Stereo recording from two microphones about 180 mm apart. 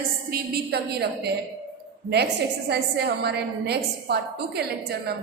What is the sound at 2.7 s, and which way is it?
A woman's voice, 65° right (ahead or behind).